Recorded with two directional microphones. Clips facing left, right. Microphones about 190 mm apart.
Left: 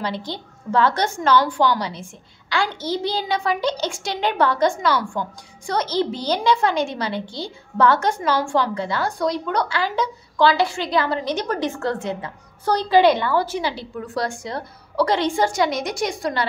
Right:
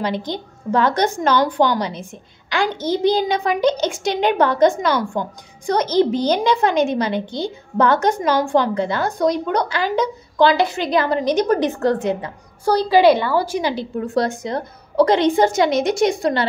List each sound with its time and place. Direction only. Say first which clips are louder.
0.0 s a woman's voice: right 4 dB; 15° right (ahead or behind)